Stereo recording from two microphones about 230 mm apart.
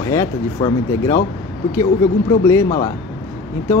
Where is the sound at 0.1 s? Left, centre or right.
Centre.